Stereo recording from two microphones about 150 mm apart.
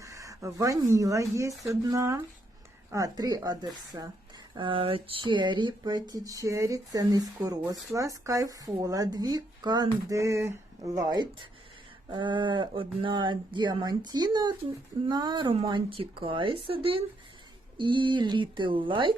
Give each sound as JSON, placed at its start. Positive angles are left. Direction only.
{"t": 0.0, "sound": "speech", "side_deg": -20}